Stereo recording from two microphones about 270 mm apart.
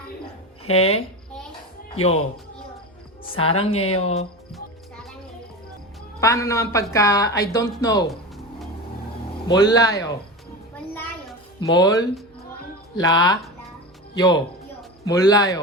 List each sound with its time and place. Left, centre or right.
0.6 s speech: left
3.5 s speech: left
6.1 s speech: centre
9.5 s speech: centre
10.8 s a sound: centre
13.0 s speech: centre